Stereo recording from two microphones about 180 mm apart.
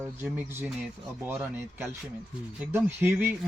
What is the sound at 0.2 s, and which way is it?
Speech, 10° right (ahead or behind).